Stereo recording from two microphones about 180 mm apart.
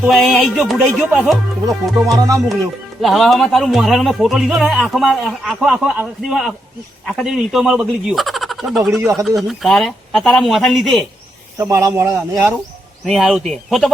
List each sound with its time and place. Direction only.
0.0 s a man's voice: centre (ahead or behind)
2.0 s music: 20° right (ahead or behind)
3.0 s a man's voice: centre (ahead or behind)
9.0 s speech: 15° right (ahead or behind)
9.2 s a man's voice: centre (ahead or behind)
11.5 s speech: 15° right (ahead or behind)
13.1 s a man's voice: centre (ahead or behind)